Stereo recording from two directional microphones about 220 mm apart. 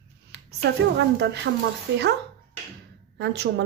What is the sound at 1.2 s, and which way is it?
Speech, 50° right (ahead or behind).